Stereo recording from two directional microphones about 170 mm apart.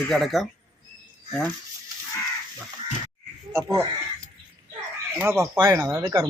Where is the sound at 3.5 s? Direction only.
15° right (ahead or behind).